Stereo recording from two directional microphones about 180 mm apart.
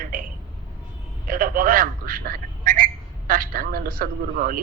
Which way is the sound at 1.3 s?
50° right (ahead or behind).